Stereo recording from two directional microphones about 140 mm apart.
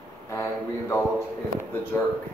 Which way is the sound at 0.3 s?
20° left (ahead or behind).